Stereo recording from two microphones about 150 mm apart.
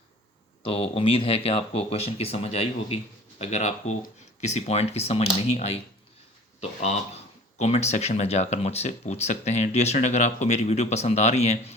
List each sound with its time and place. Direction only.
0.6 s speech: 40° left (ahead or behind)